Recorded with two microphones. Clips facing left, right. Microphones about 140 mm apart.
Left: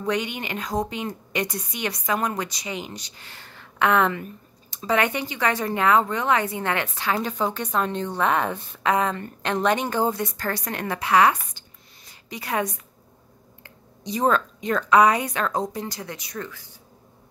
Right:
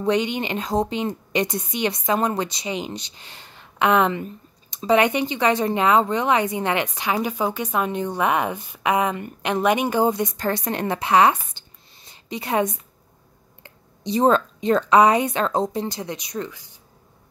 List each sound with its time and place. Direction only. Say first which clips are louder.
0.0 s a woman's voice: right 5 dB; 25° right (ahead or behind)